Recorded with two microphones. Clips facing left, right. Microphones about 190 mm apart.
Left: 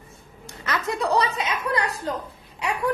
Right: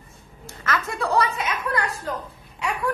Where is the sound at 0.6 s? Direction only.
20° left (ahead or behind).